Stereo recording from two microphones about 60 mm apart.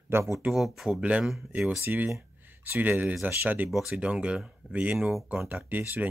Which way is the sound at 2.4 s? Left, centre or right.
Right.